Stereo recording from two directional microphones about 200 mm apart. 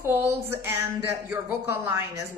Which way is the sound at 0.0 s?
10° right (ahead or behind).